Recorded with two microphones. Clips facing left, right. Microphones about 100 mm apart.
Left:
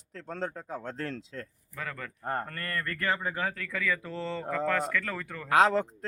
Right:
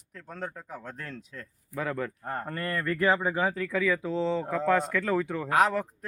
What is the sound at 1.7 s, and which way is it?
Speech, 20° right (ahead or behind).